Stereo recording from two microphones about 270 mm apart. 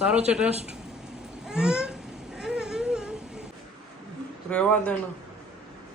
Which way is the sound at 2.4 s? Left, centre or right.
Centre.